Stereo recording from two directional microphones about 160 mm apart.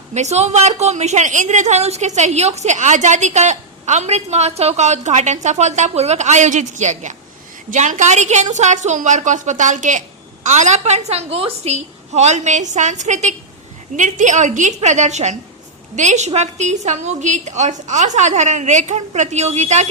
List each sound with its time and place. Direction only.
0.1 s a woman's voice: 45° right (ahead or behind)